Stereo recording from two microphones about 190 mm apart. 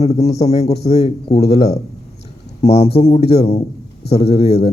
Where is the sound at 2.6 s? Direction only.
35° left (ahead or behind).